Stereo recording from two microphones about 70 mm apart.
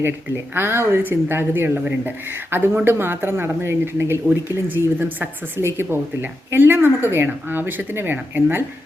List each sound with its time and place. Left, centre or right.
0.5 s a woman's voice: right